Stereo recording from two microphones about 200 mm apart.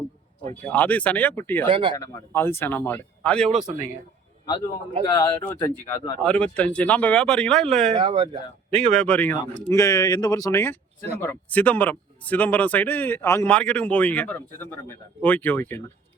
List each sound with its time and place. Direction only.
0.4 s a man's voice: 10° left (ahead or behind)
1.6 s speech: 25° right (ahead or behind)
2.0 s a man's voice: 10° left (ahead or behind)
3.5 s a man's voice: 35° right (ahead or behind)
5.0 s speech: 15° left (ahead or behind)
7.9 s speech: 25° right (ahead or behind)
8.9 s a man's voice: 5° left (ahead or behind)